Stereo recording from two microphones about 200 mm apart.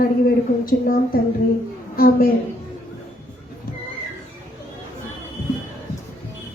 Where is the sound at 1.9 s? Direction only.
50° left (ahead or behind).